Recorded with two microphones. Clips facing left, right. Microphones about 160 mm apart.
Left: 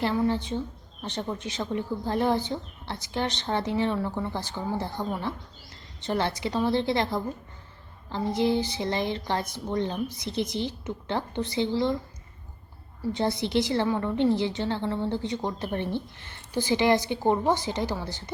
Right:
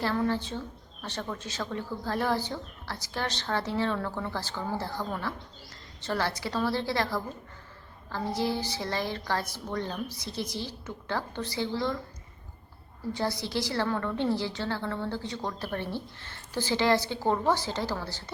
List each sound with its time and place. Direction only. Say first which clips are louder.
0.0 s a woman's voice: left 3 dB; 20° left (ahead or behind)
13.1 s a woman's voice: left 5 dB; 20° left (ahead or behind)